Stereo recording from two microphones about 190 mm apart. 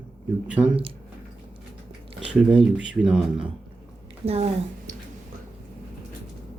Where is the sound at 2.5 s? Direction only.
5° right (ahead or behind).